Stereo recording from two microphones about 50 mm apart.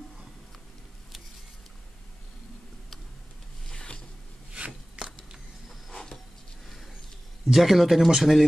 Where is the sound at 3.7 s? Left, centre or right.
Centre.